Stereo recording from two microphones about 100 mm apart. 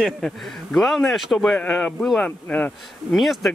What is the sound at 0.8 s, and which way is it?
Speech, centre (ahead or behind).